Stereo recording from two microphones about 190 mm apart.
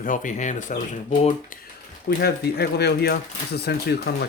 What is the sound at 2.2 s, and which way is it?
Speech, 55° left (ahead or behind).